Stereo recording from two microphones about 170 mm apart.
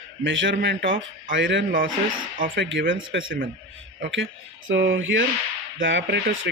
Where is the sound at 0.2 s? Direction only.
90° right.